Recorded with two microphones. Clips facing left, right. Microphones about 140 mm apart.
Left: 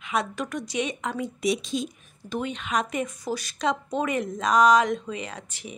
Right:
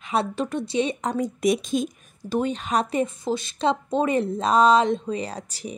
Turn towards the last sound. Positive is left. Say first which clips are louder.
# right 5 dB
turn(degrees=-35)  # may be behind; listen again after turning